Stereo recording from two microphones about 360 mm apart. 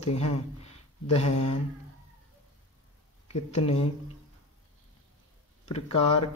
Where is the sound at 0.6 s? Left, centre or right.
Centre.